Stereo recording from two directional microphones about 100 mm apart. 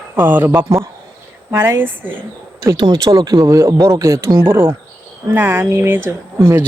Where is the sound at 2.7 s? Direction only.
45° right (ahead or behind).